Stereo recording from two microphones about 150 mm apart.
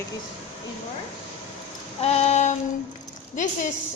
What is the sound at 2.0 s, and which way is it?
A woman's voice, 45° left (ahead or behind).